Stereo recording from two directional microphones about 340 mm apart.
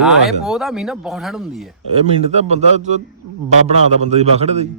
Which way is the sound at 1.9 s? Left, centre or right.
Centre.